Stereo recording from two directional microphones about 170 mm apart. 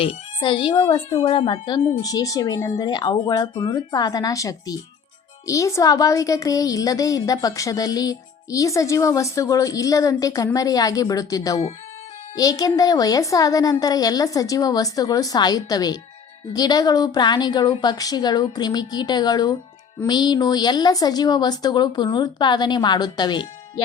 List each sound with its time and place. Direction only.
0.0 s speech: 30° left (ahead or behind)